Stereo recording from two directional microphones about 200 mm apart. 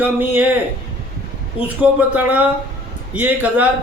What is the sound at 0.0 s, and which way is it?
Speech, 10° right (ahead or behind).